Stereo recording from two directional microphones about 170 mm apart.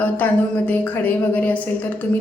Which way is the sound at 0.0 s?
10° left (ahead or behind).